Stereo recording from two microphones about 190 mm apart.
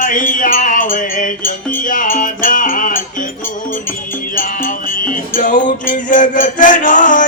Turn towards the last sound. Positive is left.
turn(degrees=45)  # may be behind; listen again after turning